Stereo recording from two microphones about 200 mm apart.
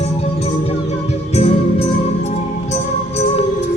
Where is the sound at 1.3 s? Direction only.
30° left (ahead or behind).